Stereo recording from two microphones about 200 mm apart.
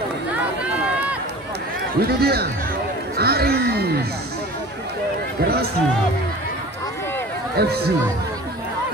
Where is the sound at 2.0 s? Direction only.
50° right (ahead or behind).